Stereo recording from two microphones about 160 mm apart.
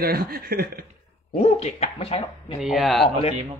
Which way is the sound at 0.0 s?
70° right (ahead or behind).